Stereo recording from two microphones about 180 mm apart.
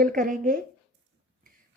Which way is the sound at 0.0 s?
50° right (ahead or behind).